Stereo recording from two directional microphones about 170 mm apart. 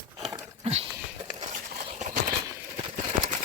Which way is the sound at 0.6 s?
35° right (ahead or behind).